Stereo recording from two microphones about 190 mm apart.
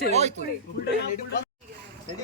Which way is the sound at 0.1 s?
35° right (ahead or behind).